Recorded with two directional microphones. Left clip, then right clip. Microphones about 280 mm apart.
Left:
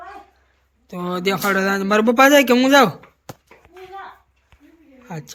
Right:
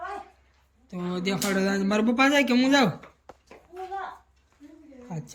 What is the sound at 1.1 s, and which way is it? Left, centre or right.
Speech, centre.